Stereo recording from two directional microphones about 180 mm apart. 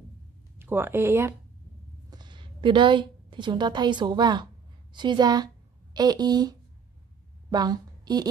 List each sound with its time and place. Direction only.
0.6 s speech: 10° right (ahead or behind)
2.0 s a woman's voice: 25° right (ahead or behind)